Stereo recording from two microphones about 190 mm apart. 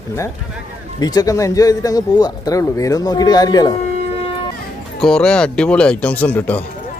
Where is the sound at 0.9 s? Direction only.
20° left (ahead or behind).